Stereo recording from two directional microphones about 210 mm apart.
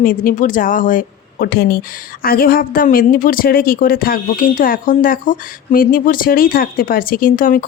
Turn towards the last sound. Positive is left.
turn(degrees=40)  # may be behind; listen again after turning